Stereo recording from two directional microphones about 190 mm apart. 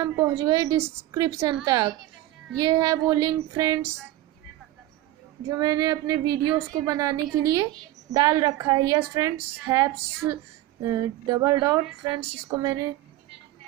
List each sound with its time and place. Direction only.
0.0 s a woman's voice: 20° right (ahead or behind)
5.5 s a woman's voice: 20° right (ahead or behind)